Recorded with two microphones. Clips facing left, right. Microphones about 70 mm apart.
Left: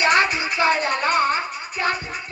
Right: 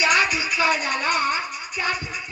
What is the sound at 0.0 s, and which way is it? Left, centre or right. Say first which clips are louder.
Music: left 2 dB; left.